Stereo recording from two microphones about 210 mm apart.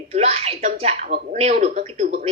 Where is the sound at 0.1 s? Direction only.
30° right (ahead or behind).